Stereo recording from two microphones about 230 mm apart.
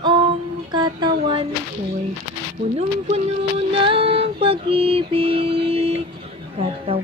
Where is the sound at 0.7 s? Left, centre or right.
Centre.